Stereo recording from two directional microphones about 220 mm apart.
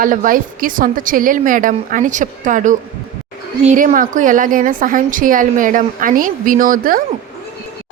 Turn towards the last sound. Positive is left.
turn(degrees=-40)  # may be behind; listen again after turning